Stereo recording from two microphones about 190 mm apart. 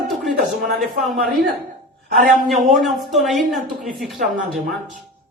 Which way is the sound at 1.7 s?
45° right (ahead or behind).